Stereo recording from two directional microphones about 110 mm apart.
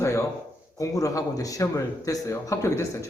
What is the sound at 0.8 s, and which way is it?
A man's voice, 30° left (ahead or behind).